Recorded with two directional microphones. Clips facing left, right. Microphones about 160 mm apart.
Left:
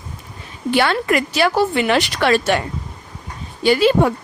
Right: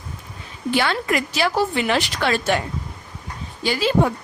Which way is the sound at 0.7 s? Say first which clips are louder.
Left 4 dB; 60° left (ahead or behind).